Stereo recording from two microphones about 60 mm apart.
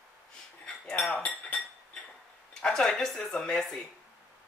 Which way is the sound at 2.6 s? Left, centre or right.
Centre.